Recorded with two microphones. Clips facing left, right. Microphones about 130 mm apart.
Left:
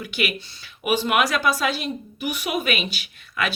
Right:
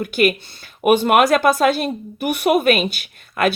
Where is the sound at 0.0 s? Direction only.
50° right (ahead or behind).